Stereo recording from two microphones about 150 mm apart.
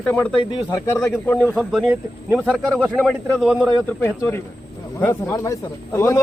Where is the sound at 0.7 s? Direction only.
20° left (ahead or behind).